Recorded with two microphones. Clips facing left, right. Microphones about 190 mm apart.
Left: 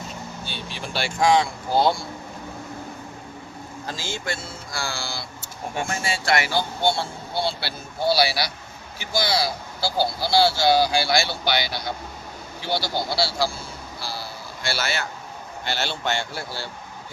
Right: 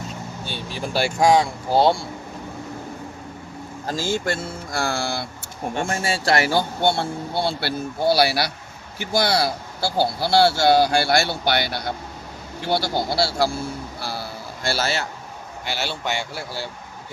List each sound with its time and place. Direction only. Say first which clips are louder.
0.4 s speech: right 8 dB; 40° right (ahead or behind)
3.8 s speech: right 7 dB; 50° right (ahead or behind)
5.9 s speech: right 2 dB; 35° right (ahead or behind)
6.5 s speech: right 3 dB; 55° right (ahead or behind)
14.7 s speech: right 4 dB; 35° right (ahead or behind)
15.6 s speech: even; 10° right (ahead or behind)